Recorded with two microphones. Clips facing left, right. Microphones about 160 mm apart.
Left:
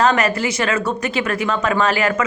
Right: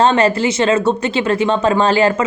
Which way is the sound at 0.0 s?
30° right (ahead or behind).